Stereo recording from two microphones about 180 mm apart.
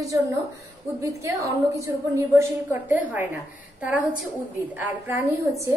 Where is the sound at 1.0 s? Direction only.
15° right (ahead or behind).